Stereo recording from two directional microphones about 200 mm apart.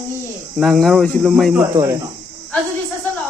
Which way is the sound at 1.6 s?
15° right (ahead or behind).